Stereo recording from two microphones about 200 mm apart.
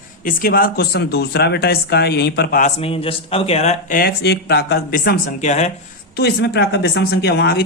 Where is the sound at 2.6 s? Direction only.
30° left (ahead or behind).